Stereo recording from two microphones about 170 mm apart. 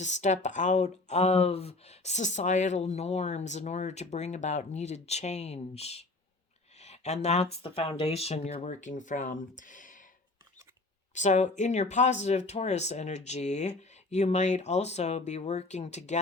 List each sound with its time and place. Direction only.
0.0 s speech: 45° left (ahead or behind)
6.7 s a sound: 40° left (ahead or behind)
7.5 s speech: 35° left (ahead or behind)
11.1 s speech: 45° left (ahead or behind)